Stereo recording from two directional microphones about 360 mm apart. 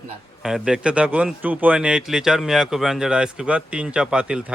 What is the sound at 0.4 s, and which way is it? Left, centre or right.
Speech, centre.